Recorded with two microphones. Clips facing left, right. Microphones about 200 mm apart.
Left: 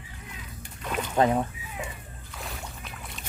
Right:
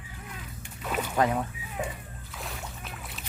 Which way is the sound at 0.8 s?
5° right (ahead or behind).